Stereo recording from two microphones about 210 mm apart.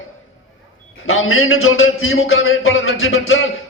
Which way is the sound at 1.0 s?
75° left (ahead or behind).